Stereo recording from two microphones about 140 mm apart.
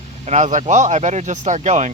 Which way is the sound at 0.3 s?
55° right (ahead or behind).